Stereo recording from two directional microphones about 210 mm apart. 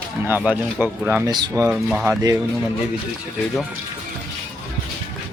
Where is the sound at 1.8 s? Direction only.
5° right (ahead or behind).